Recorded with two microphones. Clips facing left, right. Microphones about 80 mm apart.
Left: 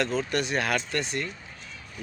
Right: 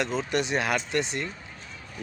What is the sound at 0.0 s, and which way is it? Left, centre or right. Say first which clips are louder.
A man's voice: even; centre.